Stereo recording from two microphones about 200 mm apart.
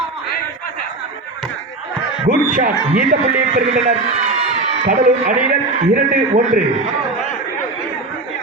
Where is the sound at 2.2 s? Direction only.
45° right (ahead or behind).